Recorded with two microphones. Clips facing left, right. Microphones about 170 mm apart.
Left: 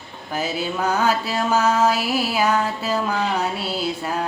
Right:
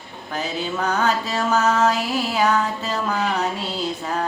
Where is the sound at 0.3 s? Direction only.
10° left (ahead or behind).